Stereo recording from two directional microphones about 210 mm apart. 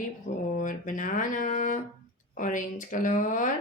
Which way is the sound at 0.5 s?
40° left (ahead or behind).